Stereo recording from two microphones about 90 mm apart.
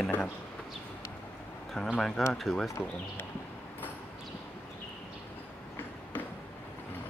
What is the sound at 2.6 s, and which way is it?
Speech, 30° left (ahead or behind).